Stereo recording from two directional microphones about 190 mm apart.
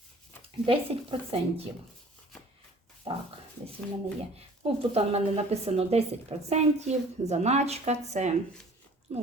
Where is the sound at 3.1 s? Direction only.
30° right (ahead or behind).